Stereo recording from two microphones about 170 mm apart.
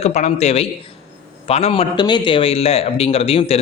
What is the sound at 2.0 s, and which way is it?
A man's voice, 25° left (ahead or behind).